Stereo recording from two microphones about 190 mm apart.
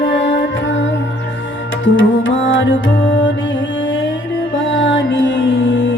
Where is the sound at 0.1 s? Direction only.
75° left (ahead or behind).